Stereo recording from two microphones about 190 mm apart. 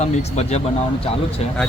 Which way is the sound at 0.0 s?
35° left (ahead or behind).